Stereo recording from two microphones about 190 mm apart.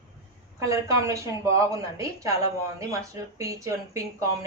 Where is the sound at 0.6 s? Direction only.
15° right (ahead or behind).